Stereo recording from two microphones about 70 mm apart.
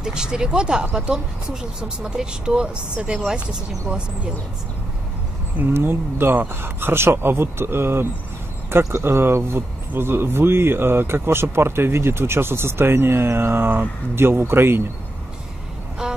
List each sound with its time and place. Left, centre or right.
0.0 s speech: centre
5.6 s speech: right
16.0 s a sound: centre